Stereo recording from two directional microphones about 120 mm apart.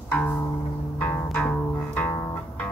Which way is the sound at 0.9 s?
15° left (ahead or behind).